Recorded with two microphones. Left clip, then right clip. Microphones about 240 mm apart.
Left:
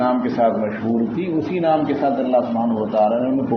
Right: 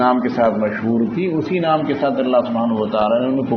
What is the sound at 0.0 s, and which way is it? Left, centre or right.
Speech, right.